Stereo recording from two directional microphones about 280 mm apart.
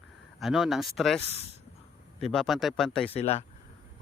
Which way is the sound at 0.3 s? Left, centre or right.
Centre.